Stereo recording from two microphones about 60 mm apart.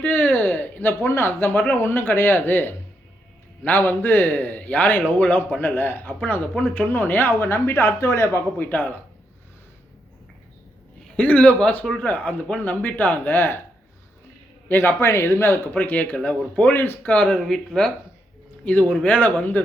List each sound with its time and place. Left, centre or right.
0.0 s a sound: left
1.0 s a man's voice: left
5.5 s a man's voice: left
11.2 s a man's voice: left
14.7 s a man's voice: left
15.7 s a man's voice: left
16.7 s speech: left
17.0 s a man's voice: left
17.4 s speech: centre
18.6 s a man's voice: left